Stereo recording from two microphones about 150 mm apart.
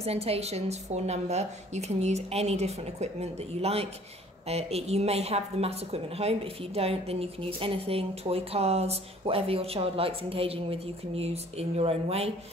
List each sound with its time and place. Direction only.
0.0 s a woman's voice: 40° right (ahead or behind)